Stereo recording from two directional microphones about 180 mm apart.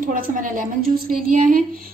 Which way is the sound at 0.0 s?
50° right (ahead or behind).